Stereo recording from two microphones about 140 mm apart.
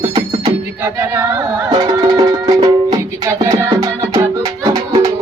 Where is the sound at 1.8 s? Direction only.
30° right (ahead or behind).